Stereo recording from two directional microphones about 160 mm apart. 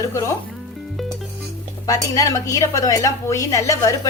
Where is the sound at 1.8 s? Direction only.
20° left (ahead or behind).